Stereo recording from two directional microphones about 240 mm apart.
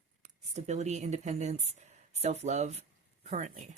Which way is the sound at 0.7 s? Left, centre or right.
Right.